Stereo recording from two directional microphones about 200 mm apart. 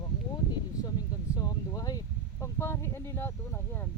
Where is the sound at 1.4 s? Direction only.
20° left (ahead or behind).